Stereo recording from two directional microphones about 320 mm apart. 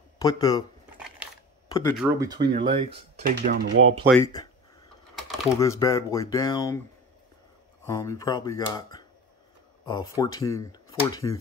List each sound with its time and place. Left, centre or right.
0.2 s speech: centre
1.7 s speech: centre
2.0 s speech: centre; by 3.9 s right
4.2 s speech: centre
5.5 s speech: centre
7.8 s speech: centre